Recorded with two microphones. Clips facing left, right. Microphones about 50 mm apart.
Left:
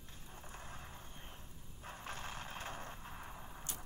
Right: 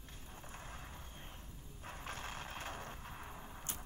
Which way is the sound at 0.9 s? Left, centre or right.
Centre.